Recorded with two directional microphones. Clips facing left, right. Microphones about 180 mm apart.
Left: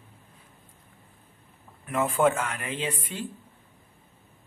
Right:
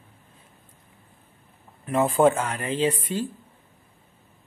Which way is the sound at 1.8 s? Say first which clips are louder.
Right 4 dB; 30° right (ahead or behind).